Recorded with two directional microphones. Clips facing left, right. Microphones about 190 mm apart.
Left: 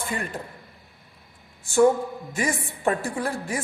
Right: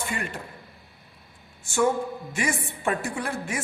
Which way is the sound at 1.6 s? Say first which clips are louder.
Left 5 dB; 35° left (ahead or behind).